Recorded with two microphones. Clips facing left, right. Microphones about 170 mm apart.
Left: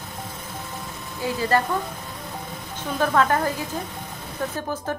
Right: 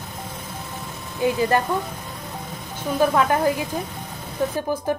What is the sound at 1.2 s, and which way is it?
Speech, 15° right (ahead or behind).